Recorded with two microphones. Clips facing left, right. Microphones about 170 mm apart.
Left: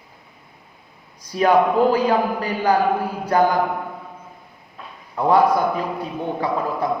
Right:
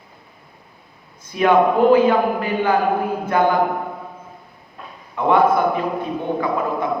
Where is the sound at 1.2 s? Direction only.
35° left (ahead or behind).